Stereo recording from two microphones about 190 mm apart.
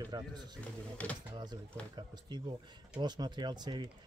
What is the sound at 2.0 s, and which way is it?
Speech, 25° right (ahead or behind).